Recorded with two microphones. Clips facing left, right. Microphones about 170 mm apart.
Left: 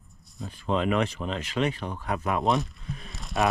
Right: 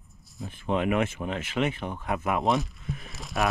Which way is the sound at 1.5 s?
20° right (ahead or behind).